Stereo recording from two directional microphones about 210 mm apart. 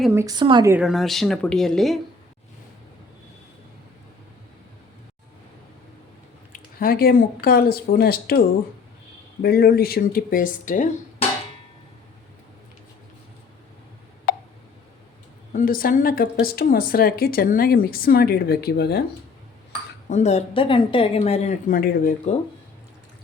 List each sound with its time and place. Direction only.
0.1 s speech: 15° right (ahead or behind)
0.7 s speech: 5° right (ahead or behind)
6.5 s speech: 45° left (ahead or behind)
14.3 s a sound: 45° left (ahead or behind)
15.5 s speech: 45° left (ahead or behind)
20.1 s speech: 35° left (ahead or behind)